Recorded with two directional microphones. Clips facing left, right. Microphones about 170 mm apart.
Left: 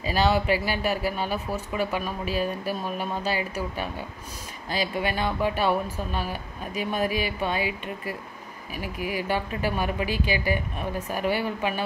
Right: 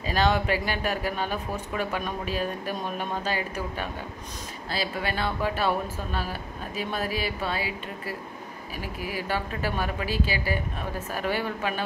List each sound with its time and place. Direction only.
0.0 s speech: 10° left (ahead or behind)
8.7 s speech: 15° left (ahead or behind)